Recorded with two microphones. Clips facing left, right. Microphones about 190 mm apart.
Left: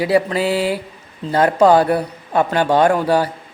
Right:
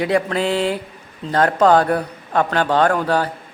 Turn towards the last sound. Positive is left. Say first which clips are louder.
# left 3 dB
turn(degrees=10)  # may be behind; listen again after turning